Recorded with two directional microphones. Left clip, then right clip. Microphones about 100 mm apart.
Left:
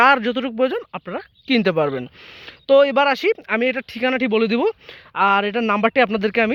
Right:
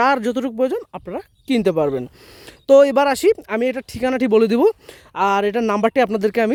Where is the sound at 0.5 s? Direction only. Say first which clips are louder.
Even; 50° right (ahead or behind).